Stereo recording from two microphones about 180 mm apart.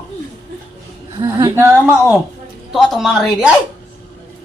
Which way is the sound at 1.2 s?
15° right (ahead or behind).